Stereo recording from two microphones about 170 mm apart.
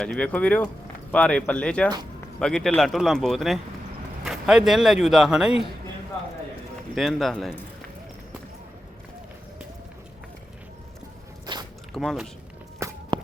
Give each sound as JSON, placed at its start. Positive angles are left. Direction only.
{"t": 0.0, "sound": "speech", "side_deg": 5}
{"t": 6.9, "sound": "speech", "side_deg": 0}
{"t": 11.5, "sound": "biting", "side_deg": -25}
{"t": 11.9, "sound": "speech", "side_deg": 0}
{"t": 12.8, "sound": "walk", "side_deg": -15}